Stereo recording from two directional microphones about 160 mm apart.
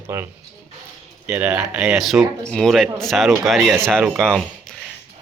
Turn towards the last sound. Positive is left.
turn(degrees=5)  # may be behind; listen again after turning